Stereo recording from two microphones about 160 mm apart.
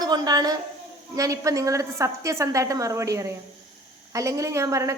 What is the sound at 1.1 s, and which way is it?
A woman's voice, 20° right (ahead or behind).